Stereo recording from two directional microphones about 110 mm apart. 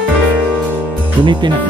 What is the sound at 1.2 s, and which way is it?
Speech, 45° right (ahead or behind).